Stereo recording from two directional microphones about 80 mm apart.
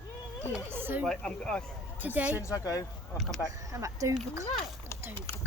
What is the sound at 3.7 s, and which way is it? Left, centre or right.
Speech, right.